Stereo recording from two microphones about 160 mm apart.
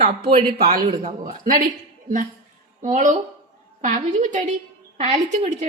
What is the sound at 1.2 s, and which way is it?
Speech, 60° right (ahead or behind).